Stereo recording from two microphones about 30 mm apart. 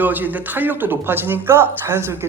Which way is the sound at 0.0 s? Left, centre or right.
Right.